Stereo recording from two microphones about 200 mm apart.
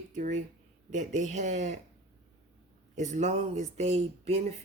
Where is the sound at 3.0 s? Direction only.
35° right (ahead or behind).